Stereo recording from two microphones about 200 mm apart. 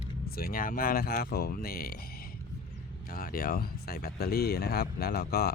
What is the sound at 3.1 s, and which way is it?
Speech, 45° left (ahead or behind).